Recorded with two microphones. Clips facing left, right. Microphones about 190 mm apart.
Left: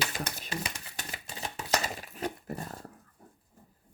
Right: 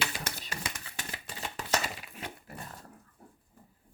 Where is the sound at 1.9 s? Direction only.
40° left (ahead or behind).